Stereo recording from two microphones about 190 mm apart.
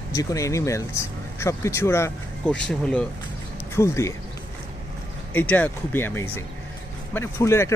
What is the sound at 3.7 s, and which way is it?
Speech, 15° left (ahead or behind).